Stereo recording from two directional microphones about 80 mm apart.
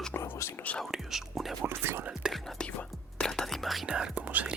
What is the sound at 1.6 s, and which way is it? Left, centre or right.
Speech, right.